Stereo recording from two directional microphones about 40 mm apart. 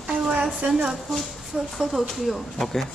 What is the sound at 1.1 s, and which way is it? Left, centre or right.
Speech, centre.